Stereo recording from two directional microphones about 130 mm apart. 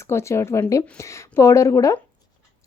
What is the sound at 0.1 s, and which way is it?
Speech, 20° left (ahead or behind).